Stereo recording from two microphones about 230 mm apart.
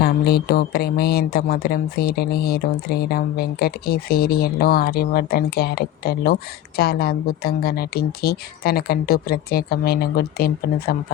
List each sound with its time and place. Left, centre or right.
0.0 s speech: left